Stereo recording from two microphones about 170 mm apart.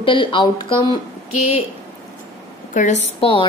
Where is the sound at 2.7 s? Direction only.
45° left (ahead or behind).